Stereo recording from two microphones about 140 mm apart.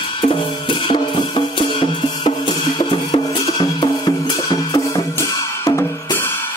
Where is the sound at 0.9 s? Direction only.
35° left (ahead or behind).